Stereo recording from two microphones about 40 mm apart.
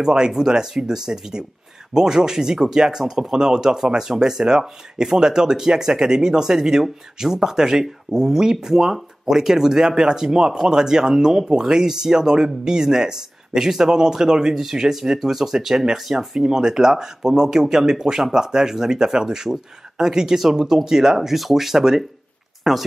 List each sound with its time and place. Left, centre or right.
0.0 s speech: centre
14.5 s speech: centre